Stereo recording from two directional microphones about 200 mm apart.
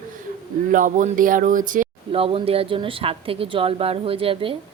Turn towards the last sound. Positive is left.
turn(degrees=-25)  # may be behind; listen again after turning